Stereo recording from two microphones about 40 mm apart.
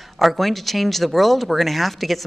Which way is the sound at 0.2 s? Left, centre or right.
Centre.